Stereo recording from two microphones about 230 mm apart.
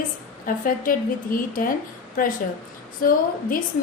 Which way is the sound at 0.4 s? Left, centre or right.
Left.